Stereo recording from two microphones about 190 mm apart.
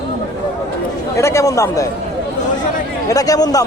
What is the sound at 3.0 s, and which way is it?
Speech, 20° left (ahead or behind).